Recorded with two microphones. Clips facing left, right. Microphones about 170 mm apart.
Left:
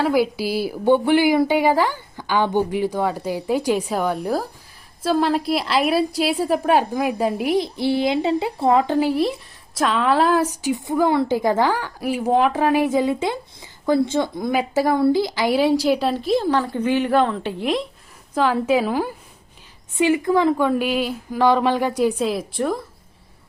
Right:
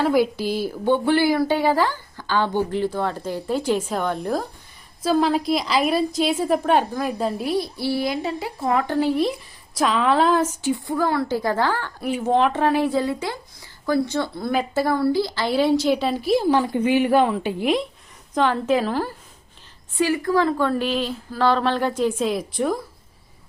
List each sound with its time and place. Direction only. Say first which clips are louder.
0.0 s a woman's voice: even; 5° left (ahead or behind); by 8.8 s 25° left (ahead or behind)
8.8 s a woman's voice: left 2 dB; 15° left (ahead or behind)
10.6 s a woman's voice: left 2 dB; 15° left (ahead or behind)
22.2 s a woman's voice: even; centre (ahead or behind)